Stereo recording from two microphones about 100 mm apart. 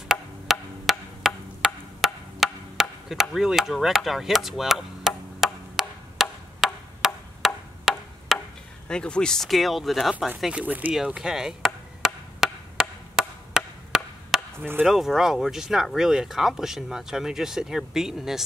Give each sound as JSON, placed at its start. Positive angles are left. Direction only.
{"t": 0.1, "sound": "wood block", "side_deg": 0}
{"t": 2.4, "sound": "chop", "side_deg": -5}
{"t": 6.6, "sound": "a sound", "side_deg": -5}
{"t": 7.4, "sound": "wood block", "side_deg": 0}
{"t": 8.3, "sound": "chopping", "side_deg": 0}
{"t": 8.8, "sound": "speech", "side_deg": 10}
{"t": 10.4, "sound": "speech", "side_deg": -15}
{"t": 11.0, "sound": "chop", "side_deg": -5}
{"t": 14.6, "sound": "speech", "side_deg": -20}
{"t": 14.9, "sound": "speech", "side_deg": -5}